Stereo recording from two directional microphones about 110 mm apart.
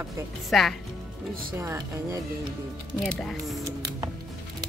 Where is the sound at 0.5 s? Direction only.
Centre (ahead or behind).